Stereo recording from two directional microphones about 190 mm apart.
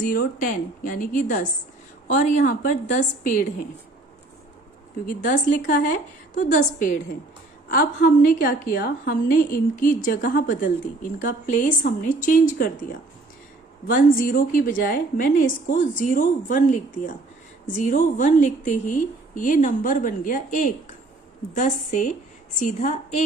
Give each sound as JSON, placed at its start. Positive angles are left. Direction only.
{"t": 0.0, "sound": "a woman's voice", "side_deg": 50}
{"t": 5.5, "sound": "a woman's voice", "side_deg": 45}